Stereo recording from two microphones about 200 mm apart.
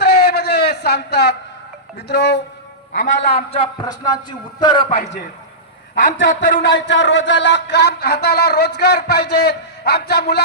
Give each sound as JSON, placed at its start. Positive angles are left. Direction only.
{"t": 0.0, "sound": "a sound", "side_deg": 55}
{"t": 2.0, "sound": "speech", "side_deg": 55}
{"t": 3.2, "sound": "speech", "side_deg": 30}
{"t": 6.1, "sound": "speech", "side_deg": 65}